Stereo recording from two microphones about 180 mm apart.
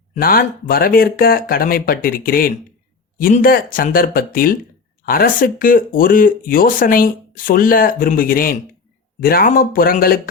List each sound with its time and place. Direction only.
0.1 s speech: 55° left (ahead or behind)